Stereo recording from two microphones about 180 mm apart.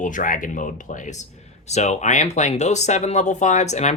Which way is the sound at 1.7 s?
40° left (ahead or behind).